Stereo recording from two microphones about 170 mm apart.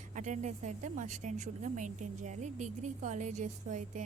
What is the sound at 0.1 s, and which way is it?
A woman's voice, 45° right (ahead or behind).